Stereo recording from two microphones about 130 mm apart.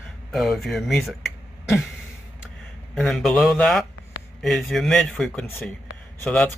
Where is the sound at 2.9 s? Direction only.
Centre (ahead or behind).